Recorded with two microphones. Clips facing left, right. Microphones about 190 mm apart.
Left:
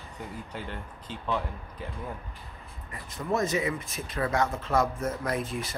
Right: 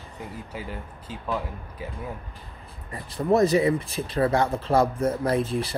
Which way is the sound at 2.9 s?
35° right (ahead or behind).